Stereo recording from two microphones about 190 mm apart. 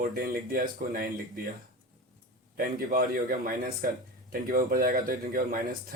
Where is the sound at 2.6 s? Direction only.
50° right (ahead or behind).